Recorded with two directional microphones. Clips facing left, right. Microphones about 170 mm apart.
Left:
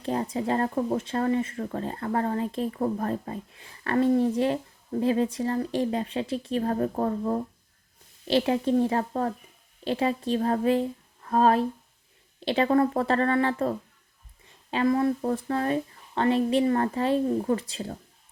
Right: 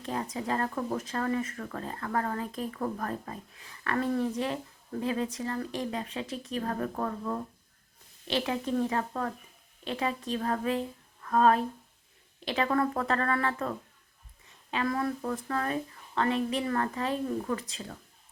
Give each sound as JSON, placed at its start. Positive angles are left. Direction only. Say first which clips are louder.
{"t": 0.0, "sound": "a woman's voice", "louder": "left 6 dB", "side_deg": 30}